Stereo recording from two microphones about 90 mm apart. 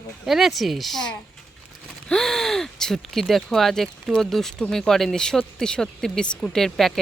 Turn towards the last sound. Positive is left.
turn(degrees=5)  # may be behind; listen again after turning